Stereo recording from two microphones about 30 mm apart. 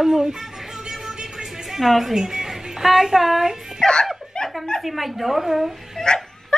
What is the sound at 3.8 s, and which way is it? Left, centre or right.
Speech, left.